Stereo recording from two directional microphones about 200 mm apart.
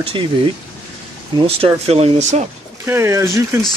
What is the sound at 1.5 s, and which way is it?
Speech, 30° right (ahead or behind).